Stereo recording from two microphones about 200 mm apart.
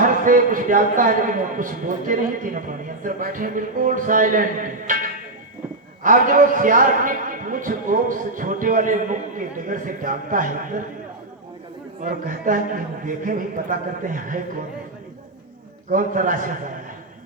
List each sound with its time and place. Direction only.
0.0 s a man's voice: 40° right (ahead or behind)
6.0 s a man's voice: 40° right (ahead or behind)
12.0 s a man's voice: 40° right (ahead or behind)
15.9 s a man's voice: 40° right (ahead or behind)